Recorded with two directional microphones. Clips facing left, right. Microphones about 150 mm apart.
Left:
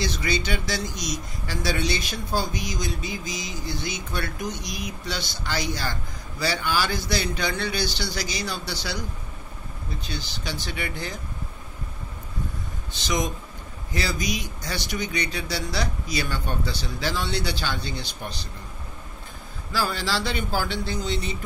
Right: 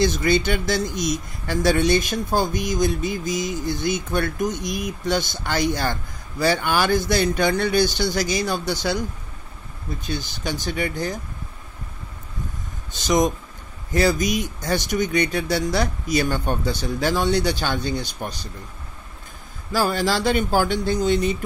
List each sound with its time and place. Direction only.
0.0 s speech: 50° right (ahead or behind)
10.0 s speech: 50° right (ahead or behind)
12.9 s speech: 45° right (ahead or behind)
19.7 s speech: 45° right (ahead or behind)